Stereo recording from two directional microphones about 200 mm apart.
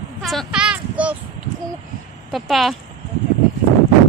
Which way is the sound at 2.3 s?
Centre (ahead or behind).